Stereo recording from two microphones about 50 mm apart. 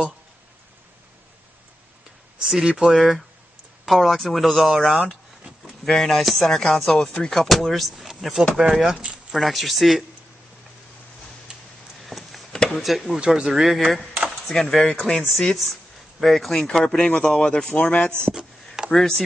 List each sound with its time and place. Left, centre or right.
2.4 s speech: centre
3.0 s speech: centre
4.9 s a sound: centre
5.9 s speech: centre
8.5 s speech: centre
9.3 s speech: centre
11.5 s a sound: centre
12.1 s a sound: centre
13.1 s speech: centre
14.5 s speech: centre
18.9 s speech: centre